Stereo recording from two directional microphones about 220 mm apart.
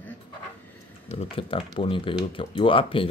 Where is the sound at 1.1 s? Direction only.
25° left (ahead or behind).